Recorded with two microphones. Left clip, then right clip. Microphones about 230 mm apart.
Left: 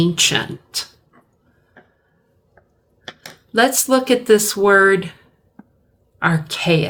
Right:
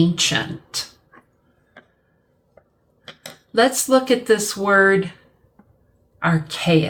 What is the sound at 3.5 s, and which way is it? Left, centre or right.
Speech, left.